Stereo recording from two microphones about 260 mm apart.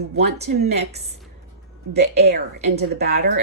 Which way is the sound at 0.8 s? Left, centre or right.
Right.